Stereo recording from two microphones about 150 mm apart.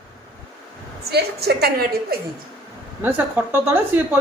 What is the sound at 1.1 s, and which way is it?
A woman's voice, 90° right.